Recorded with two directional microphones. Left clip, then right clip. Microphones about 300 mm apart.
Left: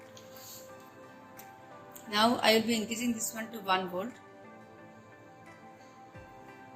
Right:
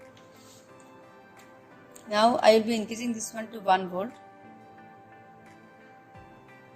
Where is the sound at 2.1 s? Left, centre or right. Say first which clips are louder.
Right 6 dB; right.